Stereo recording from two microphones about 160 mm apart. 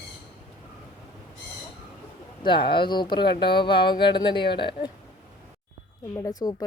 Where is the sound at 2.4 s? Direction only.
30° left (ahead or behind).